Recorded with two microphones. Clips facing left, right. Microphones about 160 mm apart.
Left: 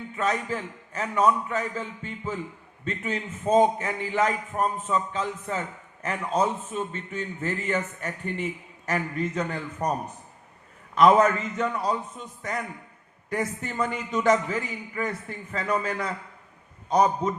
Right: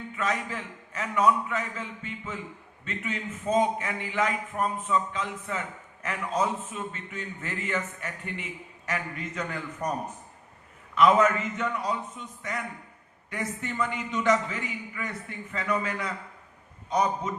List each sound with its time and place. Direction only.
0.2 s a man's voice: 35° left (ahead or behind)
10.9 s a man's voice: 35° left (ahead or behind)